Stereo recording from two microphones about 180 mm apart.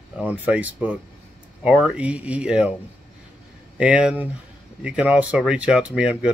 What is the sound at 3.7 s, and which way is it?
Speech, 5° right (ahead or behind).